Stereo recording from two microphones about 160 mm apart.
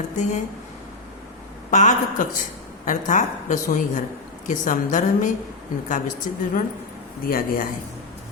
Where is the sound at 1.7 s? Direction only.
50° left (ahead or behind).